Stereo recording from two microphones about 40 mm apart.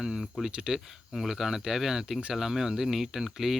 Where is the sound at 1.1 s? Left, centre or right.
Centre.